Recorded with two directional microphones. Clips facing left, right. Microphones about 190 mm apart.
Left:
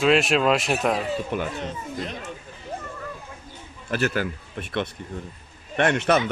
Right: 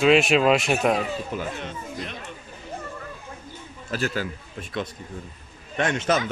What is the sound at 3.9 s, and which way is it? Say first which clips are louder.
Speech: left 3 dB; 60° left (ahead or behind).